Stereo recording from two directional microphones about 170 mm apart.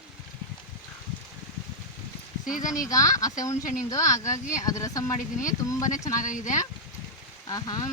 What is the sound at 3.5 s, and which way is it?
Speech, 50° left (ahead or behind).